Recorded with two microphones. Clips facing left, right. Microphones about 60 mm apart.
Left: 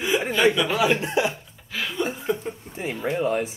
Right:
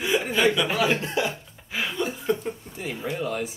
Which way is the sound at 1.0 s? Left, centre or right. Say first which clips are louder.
Left 3 dB; left.